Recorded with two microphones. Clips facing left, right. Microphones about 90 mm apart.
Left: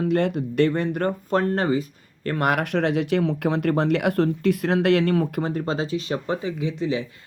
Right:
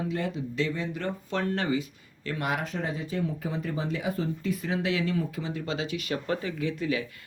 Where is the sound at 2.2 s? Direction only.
60° left (ahead or behind).